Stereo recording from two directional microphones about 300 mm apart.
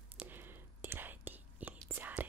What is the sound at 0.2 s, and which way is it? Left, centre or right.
Whispering, centre.